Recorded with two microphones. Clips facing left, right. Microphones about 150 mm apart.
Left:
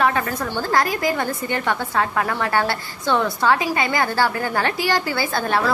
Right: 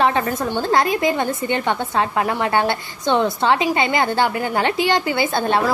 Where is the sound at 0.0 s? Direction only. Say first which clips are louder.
Right 2 dB; 25° right (ahead or behind).